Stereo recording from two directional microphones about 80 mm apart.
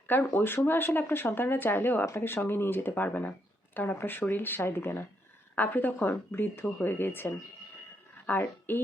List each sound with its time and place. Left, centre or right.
0.1 s speech: left